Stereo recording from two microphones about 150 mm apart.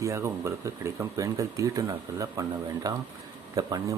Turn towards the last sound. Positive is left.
turn(degrees=-25)  # may be behind; listen again after turning